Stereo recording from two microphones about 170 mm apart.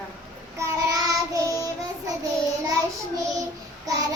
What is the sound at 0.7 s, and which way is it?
Child singing, 20° right (ahead or behind).